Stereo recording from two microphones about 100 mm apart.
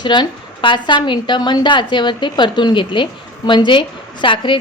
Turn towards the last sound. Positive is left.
turn(degrees=55)  # may be behind; listen again after turning